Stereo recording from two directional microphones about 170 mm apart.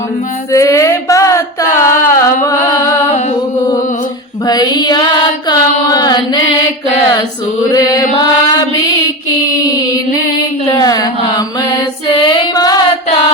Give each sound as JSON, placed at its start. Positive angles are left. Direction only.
{"t": 0.5, "sound": "a sound", "side_deg": 20}
{"t": 1.8, "sound": "music", "side_deg": 15}
{"t": 4.4, "sound": "music", "side_deg": 25}
{"t": 5.5, "sound": "mantra", "side_deg": 25}
{"t": 7.7, "sound": "chant", "side_deg": 20}
{"t": 10.7, "sound": "a sound", "side_deg": 20}
{"t": 12.0, "sound": "female singing", "side_deg": 25}